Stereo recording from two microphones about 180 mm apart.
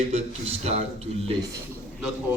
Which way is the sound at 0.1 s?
35° right (ahead or behind).